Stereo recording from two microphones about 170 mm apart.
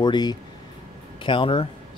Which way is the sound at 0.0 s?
25° left (ahead or behind).